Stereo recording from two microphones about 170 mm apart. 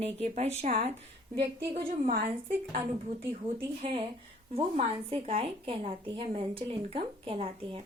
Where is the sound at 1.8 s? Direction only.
55° right (ahead or behind).